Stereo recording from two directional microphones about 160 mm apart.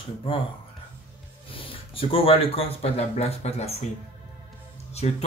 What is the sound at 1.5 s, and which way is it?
Speech, 35° left (ahead or behind).